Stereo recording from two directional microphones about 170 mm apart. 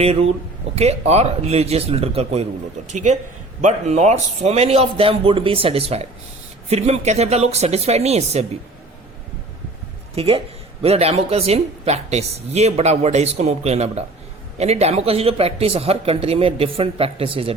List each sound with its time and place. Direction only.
0.0 s a woman's voice: 35° right (ahead or behind)
10.2 s a woman's voice: 35° right (ahead or behind)